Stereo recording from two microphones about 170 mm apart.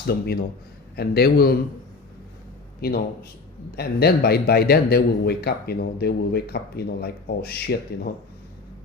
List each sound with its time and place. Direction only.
0.1 s a man's voice: 65° left (ahead or behind)
2.8 s a man's voice: 65° left (ahead or behind)